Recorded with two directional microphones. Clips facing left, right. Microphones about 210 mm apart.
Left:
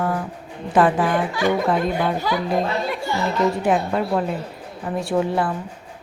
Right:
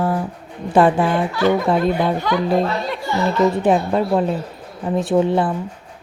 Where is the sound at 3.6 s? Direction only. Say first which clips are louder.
Right 3 dB; 25° right (ahead or behind).